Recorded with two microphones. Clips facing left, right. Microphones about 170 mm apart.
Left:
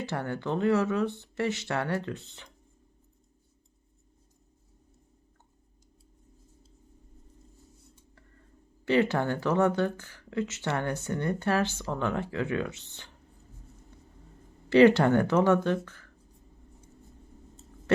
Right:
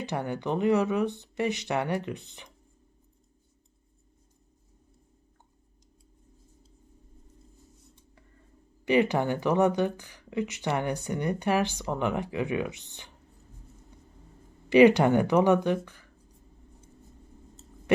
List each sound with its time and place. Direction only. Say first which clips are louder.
0.0 s speech: right 1 dB; 15° right (ahead or behind)
8.8 s speech: right 1 dB; 15° right (ahead or behind)
13.9 s vehicle: even; 15° right (ahead or behind)
14.7 s speech: right 1 dB; 15° right (ahead or behind)